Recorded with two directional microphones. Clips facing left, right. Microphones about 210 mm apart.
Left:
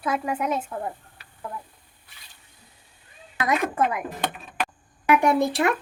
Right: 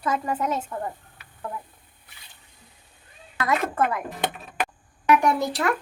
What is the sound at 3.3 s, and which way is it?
Speech, 15° left (ahead or behind).